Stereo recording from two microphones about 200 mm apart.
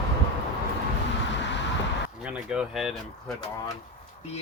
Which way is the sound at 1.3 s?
65° left (ahead or behind).